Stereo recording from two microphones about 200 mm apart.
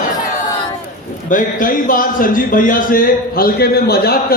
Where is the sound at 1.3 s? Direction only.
40° left (ahead or behind).